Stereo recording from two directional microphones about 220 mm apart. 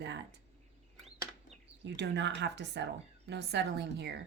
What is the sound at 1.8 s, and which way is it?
A woman's voice, 50° right (ahead or behind).